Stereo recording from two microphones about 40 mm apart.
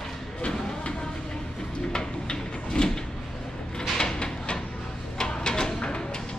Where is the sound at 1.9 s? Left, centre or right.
Centre.